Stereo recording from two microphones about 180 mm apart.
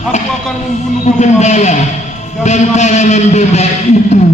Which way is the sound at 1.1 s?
40° left (ahead or behind).